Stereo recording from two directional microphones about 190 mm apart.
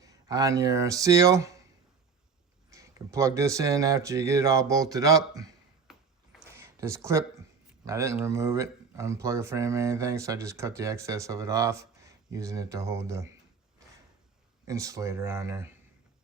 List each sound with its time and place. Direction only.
0.0 s speech: 20° right (ahead or behind)
2.6 s speech: 15° right (ahead or behind)
5.9 s a sound: centre (ahead or behind)
6.4 s a sound: 15° right (ahead or behind)
7.9 s speech: 15° right (ahead or behind)
14.7 s speech: 15° right (ahead or behind)